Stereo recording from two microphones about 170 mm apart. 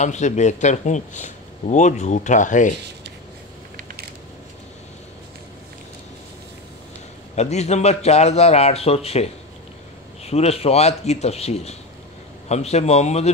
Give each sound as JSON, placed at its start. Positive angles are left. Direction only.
{"t": 0.0, "sound": "speech", "side_deg": 45}
{"t": 7.3, "sound": "a man's voice", "side_deg": 40}